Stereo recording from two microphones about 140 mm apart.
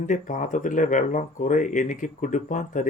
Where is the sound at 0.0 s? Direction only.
65° left (ahead or behind).